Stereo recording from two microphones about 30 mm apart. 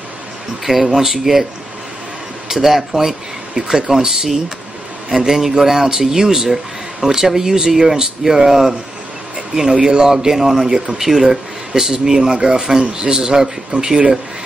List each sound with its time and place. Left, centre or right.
0.7 s speech: centre
2.4 s speech: centre
5.6 s speech: centre